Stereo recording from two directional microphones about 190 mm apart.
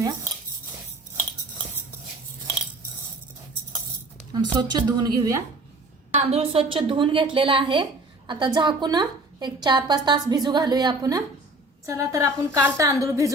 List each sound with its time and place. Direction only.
0.0 s dishes: 20° right (ahead or behind)
4.3 s a woman's voice: 25° right (ahead or behind)
6.1 s a woman's voice: 30° right (ahead or behind); by 13.3 s 15° right (ahead or behind)